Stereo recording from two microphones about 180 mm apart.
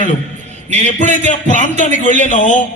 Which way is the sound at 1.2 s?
45° left (ahead or behind).